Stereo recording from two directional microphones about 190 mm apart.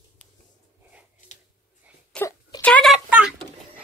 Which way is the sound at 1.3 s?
40° left (ahead or behind).